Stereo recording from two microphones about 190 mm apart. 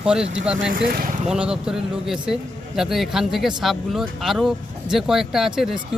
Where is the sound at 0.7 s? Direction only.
50° right (ahead or behind).